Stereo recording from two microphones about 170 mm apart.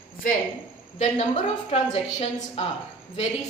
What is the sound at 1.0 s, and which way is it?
A woman's voice, 40° left (ahead or behind).